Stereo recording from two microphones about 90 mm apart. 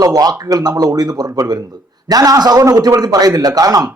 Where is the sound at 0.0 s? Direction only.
45° right (ahead or behind).